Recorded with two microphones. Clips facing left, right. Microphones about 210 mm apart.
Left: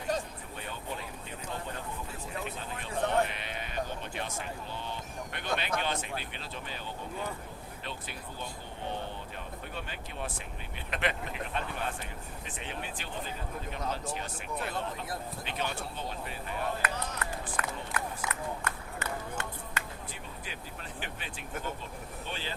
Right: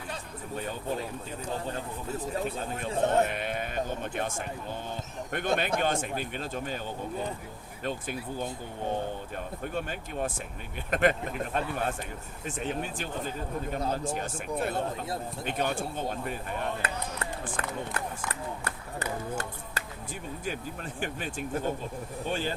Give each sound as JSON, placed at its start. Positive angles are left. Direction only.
{"t": 2.1, "sound": "speech", "side_deg": -40}
{"t": 2.9, "sound": "speech", "side_deg": -25}
{"t": 3.2, "sound": "speech", "side_deg": -50}
{"t": 9.7, "sound": "speech", "side_deg": -45}
{"t": 13.7, "sound": "speech", "side_deg": -35}
{"t": 13.9, "sound": "speech", "side_deg": -45}
{"t": 16.8, "sound": "a sound", "side_deg": -30}
{"t": 17.2, "sound": "run", "side_deg": -30}
{"t": 17.6, "sound": "speech", "side_deg": -30}
{"t": 18.0, "sound": "a sound", "side_deg": -30}
{"t": 21.0, "sound": "speech", "side_deg": -45}